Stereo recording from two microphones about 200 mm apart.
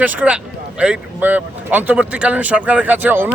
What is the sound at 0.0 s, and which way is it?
Speech, 10° right (ahead or behind).